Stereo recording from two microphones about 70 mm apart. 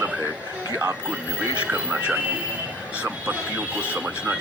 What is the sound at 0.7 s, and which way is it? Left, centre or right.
Speech, right.